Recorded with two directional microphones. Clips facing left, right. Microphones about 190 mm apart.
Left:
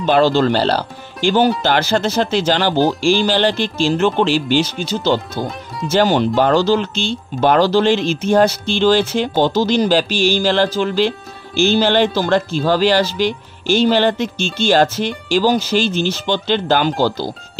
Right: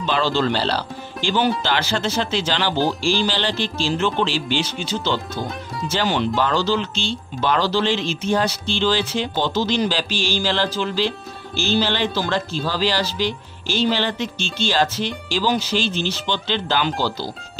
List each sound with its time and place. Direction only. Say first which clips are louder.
0.0 s speech: left 7 dB; 45° left (ahead or behind)